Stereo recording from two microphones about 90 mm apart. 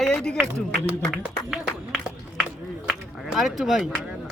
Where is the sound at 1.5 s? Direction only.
5° right (ahead or behind).